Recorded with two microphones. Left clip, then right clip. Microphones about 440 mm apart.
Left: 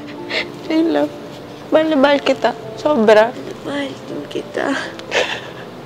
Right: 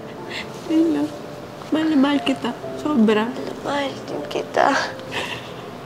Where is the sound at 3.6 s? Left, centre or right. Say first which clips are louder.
Even; right.